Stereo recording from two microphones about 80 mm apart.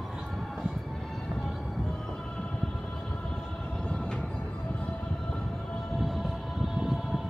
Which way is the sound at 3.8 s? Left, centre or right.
Centre.